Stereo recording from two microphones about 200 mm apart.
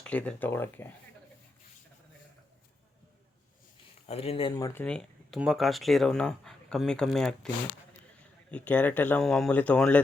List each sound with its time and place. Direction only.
0.0 s speech: 5° left (ahead or behind)
4.1 s speech: 30° left (ahead or behind); by 10.0 s 5° left (ahead or behind)